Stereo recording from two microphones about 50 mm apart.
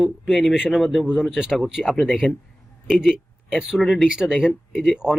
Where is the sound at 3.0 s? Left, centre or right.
Centre.